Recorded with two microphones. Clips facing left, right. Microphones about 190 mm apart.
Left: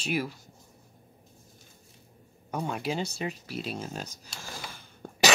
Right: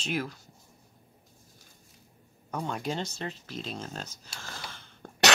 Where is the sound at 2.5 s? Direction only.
10° left (ahead or behind).